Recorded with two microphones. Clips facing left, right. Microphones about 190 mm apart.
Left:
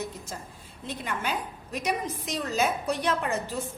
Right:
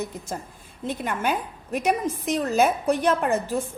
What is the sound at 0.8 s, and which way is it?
A woman's voice, 50° right (ahead or behind).